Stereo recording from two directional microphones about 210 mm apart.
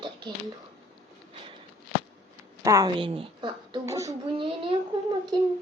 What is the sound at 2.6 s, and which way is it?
A woman's voice, 15° right (ahead or behind).